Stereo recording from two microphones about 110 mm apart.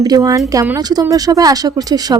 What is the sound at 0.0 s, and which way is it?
Speech, 35° right (ahead or behind).